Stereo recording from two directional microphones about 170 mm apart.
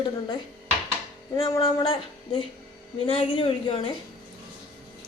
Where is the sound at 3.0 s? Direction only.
35° left (ahead or behind).